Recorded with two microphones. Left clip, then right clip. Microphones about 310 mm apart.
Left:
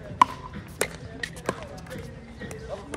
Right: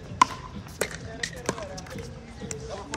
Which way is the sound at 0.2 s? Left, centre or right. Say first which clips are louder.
Left 1 dB; left.